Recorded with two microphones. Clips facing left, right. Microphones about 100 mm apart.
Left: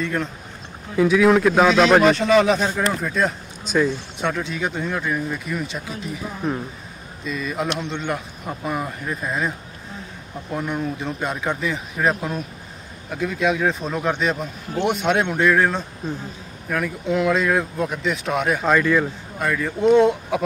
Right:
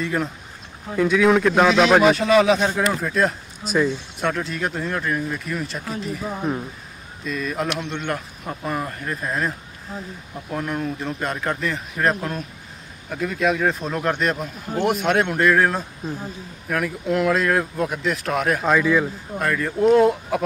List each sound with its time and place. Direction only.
0.0 s a man's voice: 5° right (ahead or behind)